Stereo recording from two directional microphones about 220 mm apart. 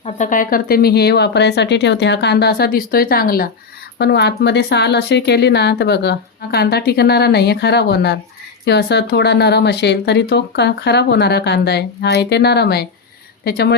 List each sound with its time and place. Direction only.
0.0 s speech: 35° left (ahead or behind)